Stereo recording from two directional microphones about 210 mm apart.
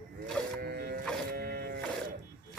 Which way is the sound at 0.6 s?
50° right (ahead or behind).